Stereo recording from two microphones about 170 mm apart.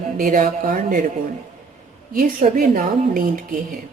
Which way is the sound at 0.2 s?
55° right (ahead or behind).